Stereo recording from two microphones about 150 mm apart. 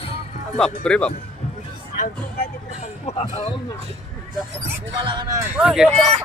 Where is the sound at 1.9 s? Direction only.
60° left (ahead or behind).